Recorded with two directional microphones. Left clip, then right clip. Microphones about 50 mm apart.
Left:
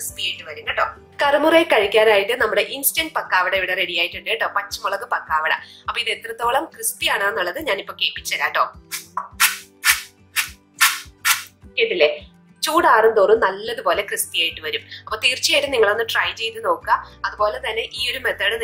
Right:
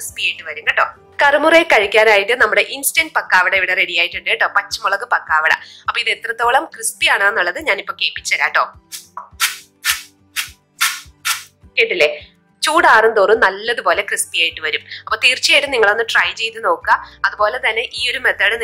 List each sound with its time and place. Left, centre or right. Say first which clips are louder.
0.0 s a sound: right 6 dB; right
0.7 s a woman's voice: right 3 dB; right
9.1 s music: left 1 dB; centre
11.7 s a woman's voice: right 3 dB; right